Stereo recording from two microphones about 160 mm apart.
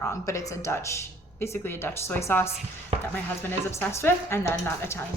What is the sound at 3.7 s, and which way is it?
A woman's voice, 15° left (ahead or behind).